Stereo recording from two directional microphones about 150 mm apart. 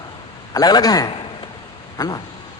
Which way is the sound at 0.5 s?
25° left (ahead or behind).